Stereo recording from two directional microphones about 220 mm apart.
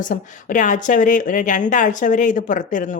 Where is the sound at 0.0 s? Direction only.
35° left (ahead or behind).